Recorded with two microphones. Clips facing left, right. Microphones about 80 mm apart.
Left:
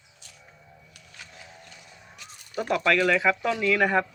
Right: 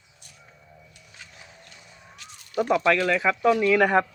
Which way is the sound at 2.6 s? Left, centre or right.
Centre.